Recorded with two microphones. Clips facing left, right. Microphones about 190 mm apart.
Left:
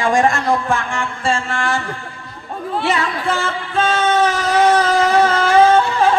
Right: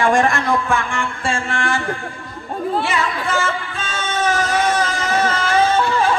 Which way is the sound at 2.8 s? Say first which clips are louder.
Left 2 dB; 45° right (ahead or behind).